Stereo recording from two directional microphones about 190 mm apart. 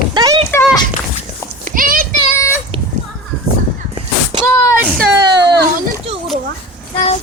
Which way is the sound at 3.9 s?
25° right (ahead or behind).